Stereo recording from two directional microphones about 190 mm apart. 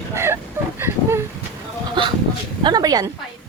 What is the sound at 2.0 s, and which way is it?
Speech, 25° right (ahead or behind).